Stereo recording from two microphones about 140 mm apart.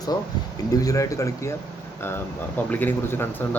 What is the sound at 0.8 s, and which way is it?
Speech, 25° left (ahead or behind).